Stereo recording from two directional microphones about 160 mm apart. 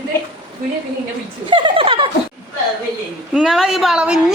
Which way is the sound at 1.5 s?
30° right (ahead or behind).